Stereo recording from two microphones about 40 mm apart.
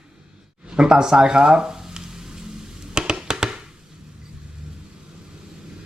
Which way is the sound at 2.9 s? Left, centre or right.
Right.